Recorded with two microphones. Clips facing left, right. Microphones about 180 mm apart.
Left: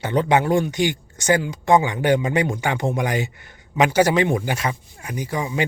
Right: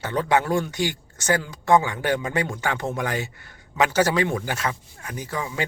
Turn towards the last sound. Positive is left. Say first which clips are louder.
# left 5 dB
turn(degrees=15)  # may be behind; listen again after turning